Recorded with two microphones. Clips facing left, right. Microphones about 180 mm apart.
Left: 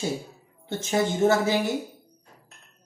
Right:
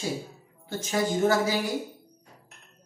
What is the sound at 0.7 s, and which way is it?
Speech, 25° left (ahead or behind).